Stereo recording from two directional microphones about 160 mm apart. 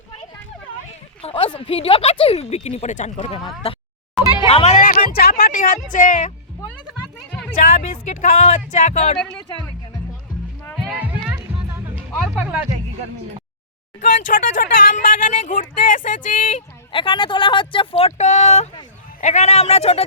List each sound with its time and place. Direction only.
1.2 s speech: 35° left (ahead or behind)
4.4 s music: 40° left (ahead or behind); by 5.8 s 60° left (ahead or behind)
5.9 s speech: 55° left (ahead or behind)
7.3 s music: 5° left (ahead or behind)
7.8 s speech: 50° left (ahead or behind)
10.8 s music: 5° right (ahead or behind)
12.4 s speech: 10° right (ahead or behind)
14.0 s speech: 55° left (ahead or behind)
16.9 s speech: 30° left (ahead or behind)